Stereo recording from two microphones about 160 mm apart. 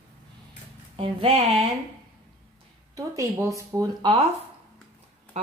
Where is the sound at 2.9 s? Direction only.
20° right (ahead or behind).